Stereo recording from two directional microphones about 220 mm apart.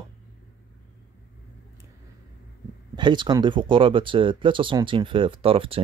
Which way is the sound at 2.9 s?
20° right (ahead or behind).